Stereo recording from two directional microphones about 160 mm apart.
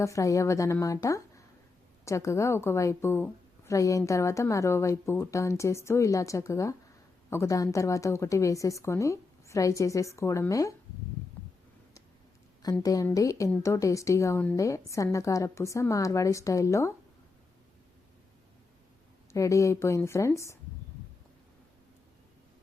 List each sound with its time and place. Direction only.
0.0 s a woman's voice: 20° left (ahead or behind)
12.8 s a woman's voice: 20° left (ahead or behind)
19.3 s a woman's voice: 20° left (ahead or behind)